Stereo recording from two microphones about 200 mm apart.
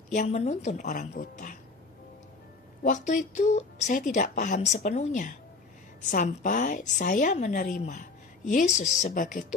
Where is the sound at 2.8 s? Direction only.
40° left (ahead or behind).